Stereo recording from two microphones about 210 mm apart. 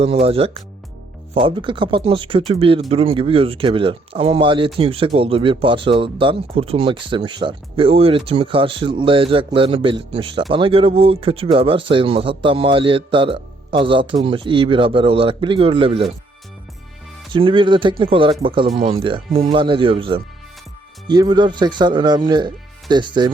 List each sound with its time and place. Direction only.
0.0 s speech: 30° right (ahead or behind)
17.3 s speech: 25° right (ahead or behind)